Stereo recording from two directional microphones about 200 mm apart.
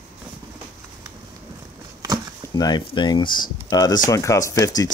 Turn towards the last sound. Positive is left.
turn(degrees=15)  # may be behind; listen again after turning